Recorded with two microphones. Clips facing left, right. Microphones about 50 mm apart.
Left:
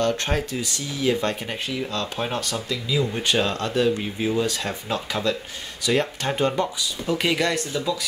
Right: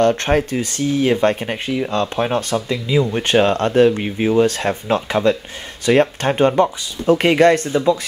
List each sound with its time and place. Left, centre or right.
0.0 s speech: right